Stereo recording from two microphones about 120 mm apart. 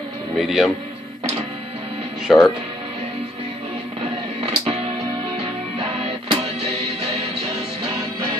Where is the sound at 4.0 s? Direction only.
50° right (ahead or behind).